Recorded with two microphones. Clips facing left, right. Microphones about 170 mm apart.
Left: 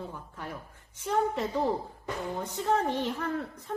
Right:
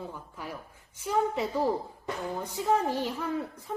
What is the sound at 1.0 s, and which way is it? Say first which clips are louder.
A woman's voice: even; 5° right (ahead or behind).